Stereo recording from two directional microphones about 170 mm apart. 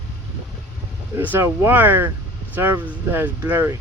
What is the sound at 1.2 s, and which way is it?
Speech, 10° right (ahead or behind).